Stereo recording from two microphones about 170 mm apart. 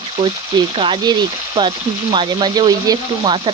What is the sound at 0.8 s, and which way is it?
Speech, 30° right (ahead or behind).